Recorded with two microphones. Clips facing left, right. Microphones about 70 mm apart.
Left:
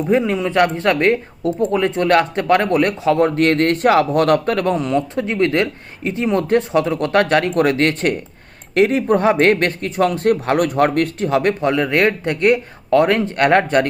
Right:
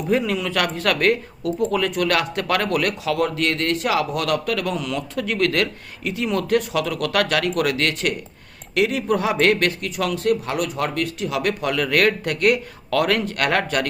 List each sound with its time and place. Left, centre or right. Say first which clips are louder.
0.1 s a man's voice: left 4 dB; left